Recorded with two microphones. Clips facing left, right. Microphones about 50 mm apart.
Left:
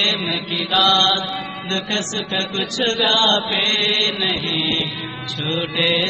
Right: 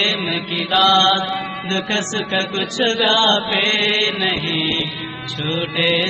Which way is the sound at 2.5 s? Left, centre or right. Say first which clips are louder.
Right 1 dB; centre.